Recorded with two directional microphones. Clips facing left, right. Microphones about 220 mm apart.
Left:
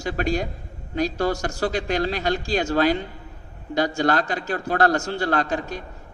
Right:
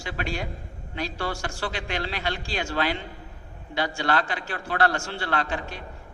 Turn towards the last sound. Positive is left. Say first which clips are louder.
# left 5 dB
turn(degrees=40)  # may be behind; listen again after turning